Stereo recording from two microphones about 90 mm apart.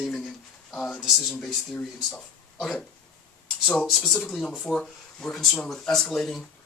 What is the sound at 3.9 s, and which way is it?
Speech, centre (ahead or behind).